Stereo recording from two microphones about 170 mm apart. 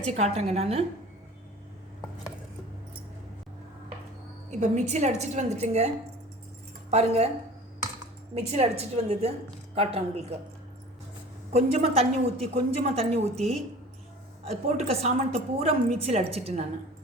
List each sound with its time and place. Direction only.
0.0 s a woman's voice: 40° right (ahead or behind)
4.6 s a woman's voice: 45° right (ahead or behind)
6.9 s a woman's voice: 40° right (ahead or behind)
8.4 s a woman's voice: 40° right (ahead or behind)
11.5 s a woman's voice: 35° right (ahead or behind)